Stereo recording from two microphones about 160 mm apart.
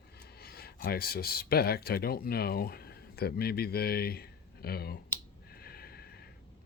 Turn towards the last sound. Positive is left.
turn(degrees=75)  # may be behind; listen again after turning